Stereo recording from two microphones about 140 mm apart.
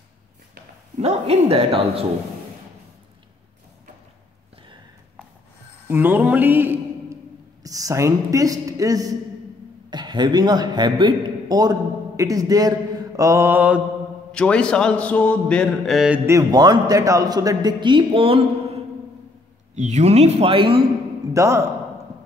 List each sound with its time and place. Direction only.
0.9 s a woman's voice: 50° right (ahead or behind)
5.9 s a man's voice: 15° right (ahead or behind); by 11.7 s 30° right (ahead or behind)
12.2 s mantra: 25° right (ahead or behind); by 13.8 s 10° right (ahead or behind)
14.3 s speech: 5° left (ahead or behind)
16.3 s a man's voice: 25° right (ahead or behind); by 18.8 s 40° right (ahead or behind)
19.7 s a woman's voice: 55° right (ahead or behind); by 20.8 s 40° right (ahead or behind)
21.3 s a man's voice: 20° right (ahead or behind)